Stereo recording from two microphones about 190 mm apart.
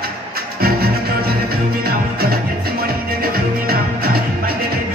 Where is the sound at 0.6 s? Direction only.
55° right (ahead or behind).